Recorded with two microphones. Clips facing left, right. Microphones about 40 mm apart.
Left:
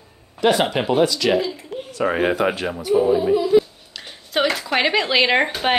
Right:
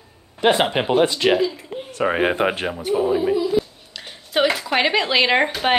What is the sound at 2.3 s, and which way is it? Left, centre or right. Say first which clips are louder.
Speech: even; right.